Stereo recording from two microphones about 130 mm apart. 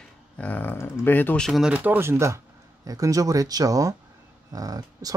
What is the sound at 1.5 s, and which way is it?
Speech, 5° right (ahead or behind).